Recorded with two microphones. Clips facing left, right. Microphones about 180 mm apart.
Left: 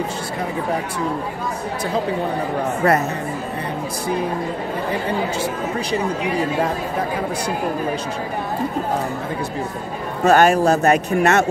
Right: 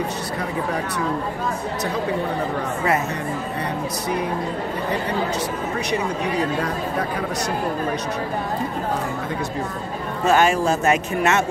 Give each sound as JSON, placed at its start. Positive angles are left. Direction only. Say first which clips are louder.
{"t": 10.2, "sound": "a man's voice", "louder": "left 4 dB", "side_deg": 45}